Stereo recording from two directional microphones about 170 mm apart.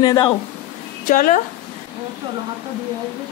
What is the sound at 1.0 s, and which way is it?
Speech, 50° left (ahead or behind).